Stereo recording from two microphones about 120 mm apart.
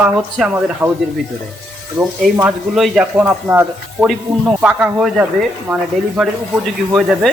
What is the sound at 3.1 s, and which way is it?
A man's voice, 15° right (ahead or behind).